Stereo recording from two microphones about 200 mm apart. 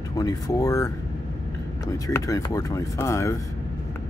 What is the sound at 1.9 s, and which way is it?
Speech, 15° left (ahead or behind).